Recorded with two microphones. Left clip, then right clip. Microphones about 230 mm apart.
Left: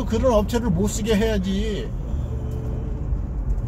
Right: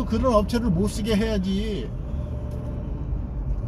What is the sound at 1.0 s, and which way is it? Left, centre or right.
Speech, centre.